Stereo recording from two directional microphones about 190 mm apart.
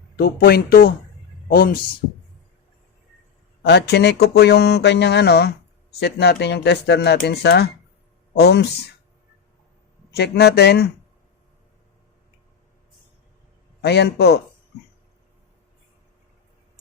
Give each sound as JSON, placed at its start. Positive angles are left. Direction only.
{"t": 0.2, "sound": "speech", "side_deg": 55}
{"t": 3.7, "sound": "speech", "side_deg": 60}
{"t": 10.1, "sound": "speech", "side_deg": 60}
{"t": 13.8, "sound": "speech", "side_deg": 60}